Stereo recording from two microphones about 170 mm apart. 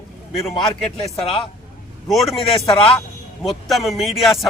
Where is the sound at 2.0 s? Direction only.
Centre (ahead or behind).